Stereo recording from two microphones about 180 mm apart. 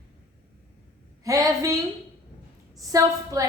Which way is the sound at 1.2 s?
20° right (ahead or behind).